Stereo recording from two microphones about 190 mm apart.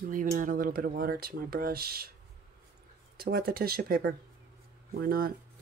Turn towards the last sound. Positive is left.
turn(degrees=-50)  # may be behind; listen again after turning